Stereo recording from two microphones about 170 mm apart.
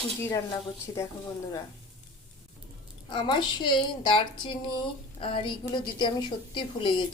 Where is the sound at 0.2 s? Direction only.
15° left (ahead or behind).